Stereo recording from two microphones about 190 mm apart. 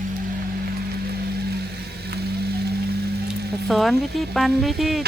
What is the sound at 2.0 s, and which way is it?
Vehicle, 60° right (ahead or behind).